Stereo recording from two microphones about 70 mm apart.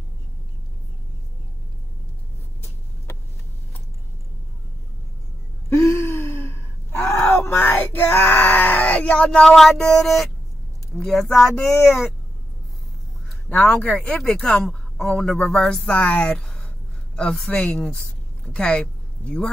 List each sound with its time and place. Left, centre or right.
5.7 s gasp: left
7.2 s screaming: left; by 9.5 s centre
9.6 s a sound: centre
11.0 s speech: centre
11.5 s speech: left
13.5 s a woman's voice: left
18.0 s a sound: centre